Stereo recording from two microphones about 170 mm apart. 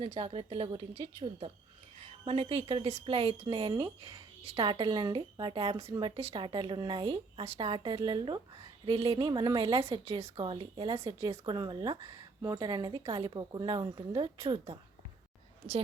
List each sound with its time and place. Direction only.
0.0 s a woman's voice: 35° right (ahead or behind)
2.2 s a woman's voice: 30° right (ahead or behind)